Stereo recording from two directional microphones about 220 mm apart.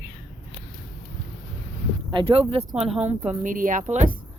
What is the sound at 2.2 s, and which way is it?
Speech, 25° right (ahead or behind).